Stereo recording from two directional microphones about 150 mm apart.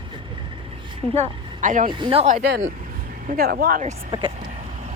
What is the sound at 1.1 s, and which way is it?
Speech, 50° right (ahead or behind).